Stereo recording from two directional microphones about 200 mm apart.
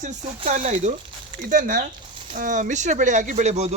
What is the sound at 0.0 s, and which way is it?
Speech, 35° right (ahead or behind).